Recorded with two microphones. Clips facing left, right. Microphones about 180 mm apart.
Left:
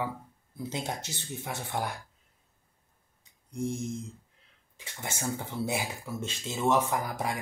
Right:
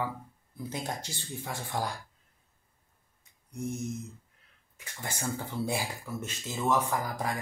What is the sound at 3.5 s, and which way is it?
Speech, 30° left (ahead or behind).